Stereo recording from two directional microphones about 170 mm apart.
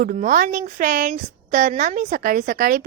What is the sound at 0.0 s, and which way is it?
A woman's voice, 55° right (ahead or behind).